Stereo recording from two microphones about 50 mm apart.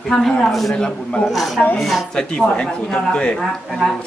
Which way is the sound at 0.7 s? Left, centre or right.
Left.